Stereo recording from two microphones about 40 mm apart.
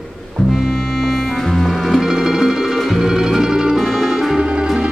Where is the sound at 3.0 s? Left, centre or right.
Centre.